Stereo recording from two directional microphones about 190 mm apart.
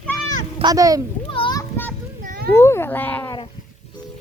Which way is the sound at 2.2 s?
45° right (ahead or behind).